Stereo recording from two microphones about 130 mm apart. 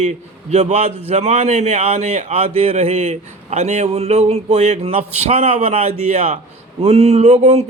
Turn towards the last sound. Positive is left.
turn(degrees=-55)  # may be behind; listen again after turning